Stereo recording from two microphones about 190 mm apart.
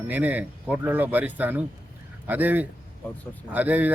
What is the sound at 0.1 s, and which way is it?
Speech, 10° right (ahead or behind).